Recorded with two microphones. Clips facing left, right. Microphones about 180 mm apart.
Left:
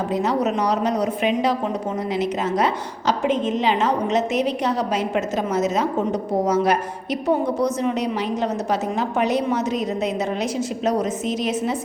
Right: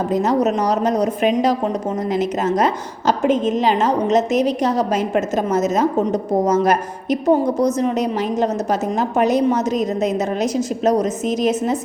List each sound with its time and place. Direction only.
0.1 s a woman's voice: 45° right (ahead or behind)